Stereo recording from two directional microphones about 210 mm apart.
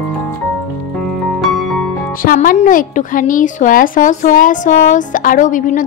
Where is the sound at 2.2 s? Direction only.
40° left (ahead or behind).